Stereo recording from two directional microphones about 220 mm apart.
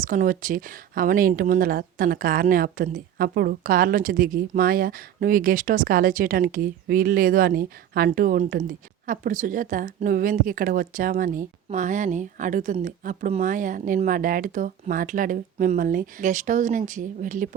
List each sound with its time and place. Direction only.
0.0 s speech: 35° right (ahead or behind)